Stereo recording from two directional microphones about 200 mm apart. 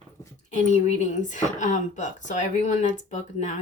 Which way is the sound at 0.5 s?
35° left (ahead or behind).